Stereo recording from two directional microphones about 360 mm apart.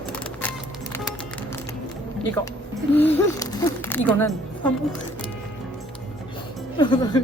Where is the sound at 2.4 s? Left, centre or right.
Centre.